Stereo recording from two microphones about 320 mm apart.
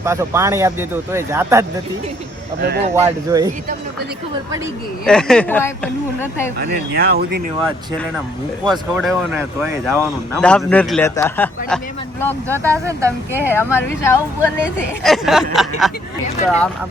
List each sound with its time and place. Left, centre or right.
0.0 s speech: centre
2.6 s speech: right
2.9 s speech: centre
5.0 s speech: centre
6.6 s speech: right
8.6 s speech: centre
12.5 s speech: centre
13.5 s speech: centre